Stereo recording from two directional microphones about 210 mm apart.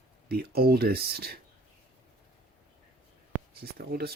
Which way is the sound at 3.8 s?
50° right (ahead or behind).